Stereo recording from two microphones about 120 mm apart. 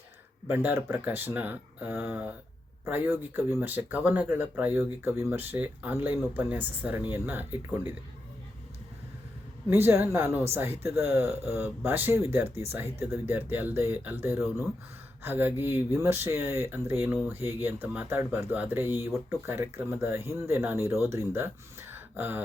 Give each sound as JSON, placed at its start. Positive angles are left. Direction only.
{"t": 0.4, "sound": "speech", "side_deg": -20}
{"t": 9.6, "sound": "speech", "side_deg": -20}